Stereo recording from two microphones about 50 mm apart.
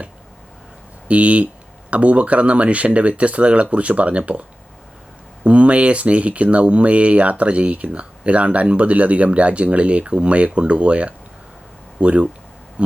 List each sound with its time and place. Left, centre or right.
1.0 s speech: right